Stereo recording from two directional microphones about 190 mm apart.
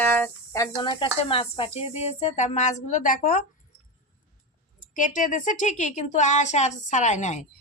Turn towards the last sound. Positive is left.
turn(degrees=40)  # may be behind; listen again after turning